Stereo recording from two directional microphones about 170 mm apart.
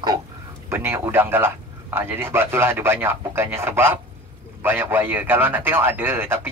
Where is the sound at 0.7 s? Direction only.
15° right (ahead or behind).